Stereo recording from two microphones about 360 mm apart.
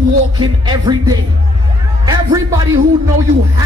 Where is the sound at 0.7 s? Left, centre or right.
Centre.